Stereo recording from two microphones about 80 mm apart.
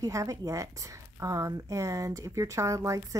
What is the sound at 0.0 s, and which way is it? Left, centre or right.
Speech, right.